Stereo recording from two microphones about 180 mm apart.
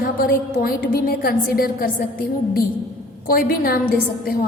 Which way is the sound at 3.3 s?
55° left (ahead or behind).